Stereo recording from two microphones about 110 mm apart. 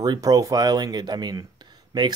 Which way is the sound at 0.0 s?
35° right (ahead or behind).